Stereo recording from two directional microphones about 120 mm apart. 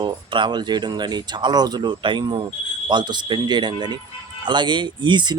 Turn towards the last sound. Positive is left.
turn(degrees=-40)  # may be behind; listen again after turning